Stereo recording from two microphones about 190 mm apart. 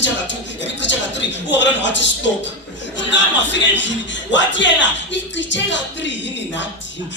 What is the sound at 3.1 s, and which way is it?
Speech, 70° left (ahead or behind).